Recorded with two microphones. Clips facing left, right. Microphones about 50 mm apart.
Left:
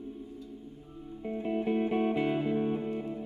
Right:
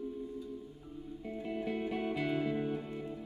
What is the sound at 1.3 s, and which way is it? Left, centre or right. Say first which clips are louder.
Music: left 7 dB; left.